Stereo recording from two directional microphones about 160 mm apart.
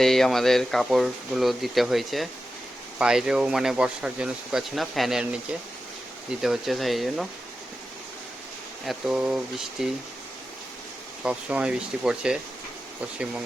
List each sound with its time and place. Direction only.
0.0 s speech: centre (ahead or behind)
6.4 s speech: centre (ahead or behind)
8.8 s speech: centre (ahead or behind)
11.2 s speech: 5° right (ahead or behind)